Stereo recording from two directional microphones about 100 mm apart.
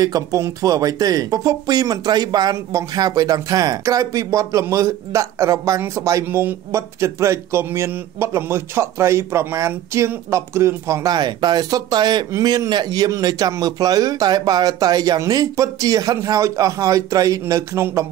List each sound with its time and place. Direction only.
0.0 s speech: 35° right (ahead or behind)